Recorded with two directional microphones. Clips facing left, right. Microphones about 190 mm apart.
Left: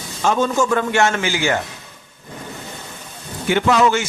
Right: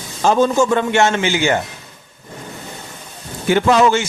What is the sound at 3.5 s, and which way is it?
Speech, 35° right (ahead or behind).